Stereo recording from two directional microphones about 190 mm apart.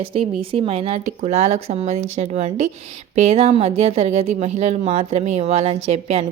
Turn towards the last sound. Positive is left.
turn(degrees=-35)  # may be behind; listen again after turning